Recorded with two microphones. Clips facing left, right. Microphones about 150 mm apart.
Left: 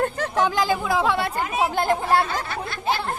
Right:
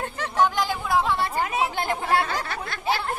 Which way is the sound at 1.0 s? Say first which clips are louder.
Left 3 dB; 75° left (ahead or behind).